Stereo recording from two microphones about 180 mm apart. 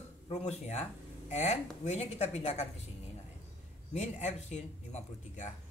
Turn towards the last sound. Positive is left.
turn(degrees=40)  # may be behind; listen again after turning